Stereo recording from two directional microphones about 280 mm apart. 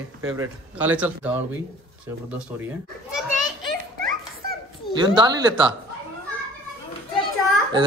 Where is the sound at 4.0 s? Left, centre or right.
Right.